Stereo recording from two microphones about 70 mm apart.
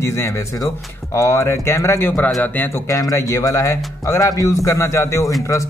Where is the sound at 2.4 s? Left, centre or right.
Left.